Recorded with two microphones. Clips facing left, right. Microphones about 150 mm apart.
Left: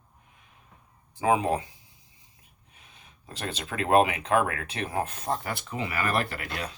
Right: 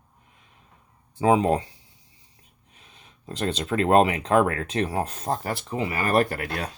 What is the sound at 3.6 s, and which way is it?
Speech, 35° right (ahead or behind).